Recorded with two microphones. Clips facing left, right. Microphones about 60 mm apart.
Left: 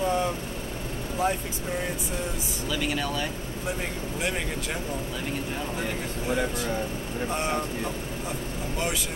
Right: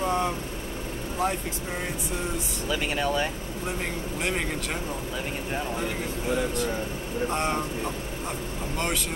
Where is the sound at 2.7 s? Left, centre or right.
Right.